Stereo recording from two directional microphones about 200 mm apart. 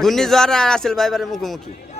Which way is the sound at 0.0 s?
Centre (ahead or behind).